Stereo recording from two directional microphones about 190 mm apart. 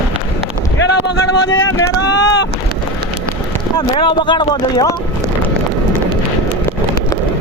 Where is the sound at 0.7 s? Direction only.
75° left (ahead or behind).